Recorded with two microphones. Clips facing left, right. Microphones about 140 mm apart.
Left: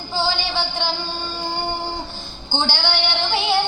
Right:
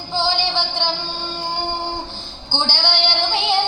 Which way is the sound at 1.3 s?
15° right (ahead or behind).